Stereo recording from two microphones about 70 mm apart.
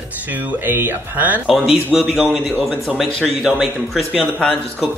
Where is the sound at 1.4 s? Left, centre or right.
Centre.